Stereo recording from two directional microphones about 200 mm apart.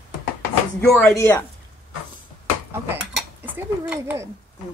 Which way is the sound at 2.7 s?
10° right (ahead or behind).